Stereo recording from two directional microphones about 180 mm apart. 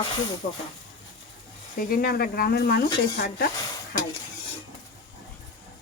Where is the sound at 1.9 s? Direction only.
55° left (ahead or behind).